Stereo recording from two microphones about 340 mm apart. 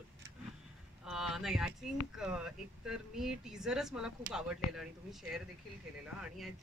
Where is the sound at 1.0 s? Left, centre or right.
Centre.